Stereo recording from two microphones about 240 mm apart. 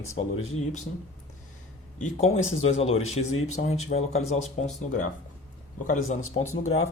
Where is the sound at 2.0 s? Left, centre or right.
Left.